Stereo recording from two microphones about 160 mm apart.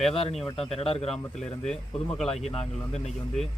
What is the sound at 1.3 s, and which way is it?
Speech, 5° left (ahead or behind).